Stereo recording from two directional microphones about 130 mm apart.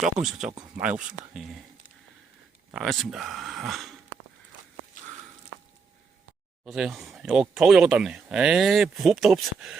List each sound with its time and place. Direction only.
0.0 s speech: 5° right (ahead or behind)
2.7 s speech: centre (ahead or behind)
6.7 s speech: centre (ahead or behind)